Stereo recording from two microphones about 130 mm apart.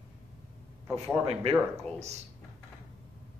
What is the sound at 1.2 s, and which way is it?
A man's voice, 50° right (ahead or behind).